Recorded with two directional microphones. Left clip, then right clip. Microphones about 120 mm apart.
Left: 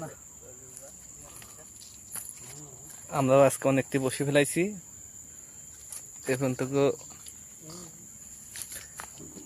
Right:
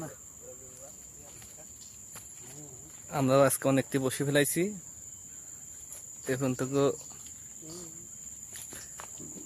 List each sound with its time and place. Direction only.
3.1 s speech: 10° right (ahead or behind)
3.4 s speech: centre (ahead or behind)
3.7 s speech: 15° right (ahead or behind)
6.2 s speech: centre (ahead or behind)